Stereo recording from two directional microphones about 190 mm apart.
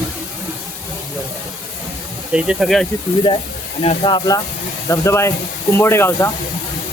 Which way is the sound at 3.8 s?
30° left (ahead or behind).